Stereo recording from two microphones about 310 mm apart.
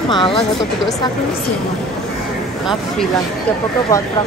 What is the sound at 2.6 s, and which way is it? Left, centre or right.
Speech, centre.